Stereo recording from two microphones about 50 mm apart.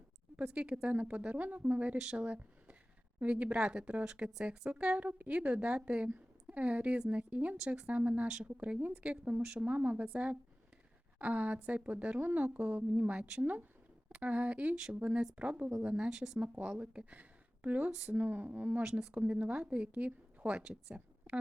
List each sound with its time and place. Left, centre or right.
0.5 s a woman's voice: right
8.3 s a woman's voice: centre
9.4 s speech: centre
9.6 s a woman's voice: right
16.4 s a woman's voice: right
17.9 s speech: centre
18.2 s speech: right
18.8 s speech: centre
19.1 s a woman's voice: right